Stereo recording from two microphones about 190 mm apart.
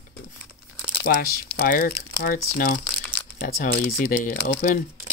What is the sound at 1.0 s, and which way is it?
Speech, 50° left (ahead or behind).